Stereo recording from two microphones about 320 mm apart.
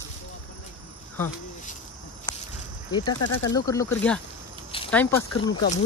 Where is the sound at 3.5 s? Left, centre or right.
Centre.